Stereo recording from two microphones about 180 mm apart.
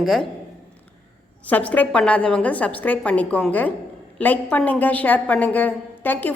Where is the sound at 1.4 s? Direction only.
10° left (ahead or behind).